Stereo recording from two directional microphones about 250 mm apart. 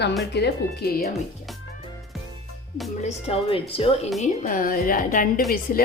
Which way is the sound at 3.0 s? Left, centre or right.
Left.